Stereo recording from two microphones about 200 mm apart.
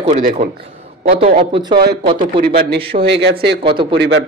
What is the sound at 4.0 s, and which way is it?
Speech, 55° right (ahead or behind).